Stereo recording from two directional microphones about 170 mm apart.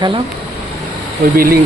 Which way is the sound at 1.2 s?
70° right (ahead or behind).